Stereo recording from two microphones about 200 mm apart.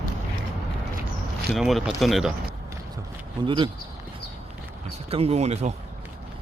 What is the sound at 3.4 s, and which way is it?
Speech, 25° right (ahead or behind).